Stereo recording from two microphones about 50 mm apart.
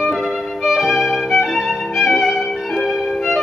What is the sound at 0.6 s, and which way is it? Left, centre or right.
Violin, centre.